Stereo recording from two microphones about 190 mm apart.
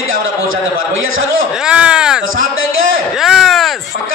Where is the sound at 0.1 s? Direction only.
90° right.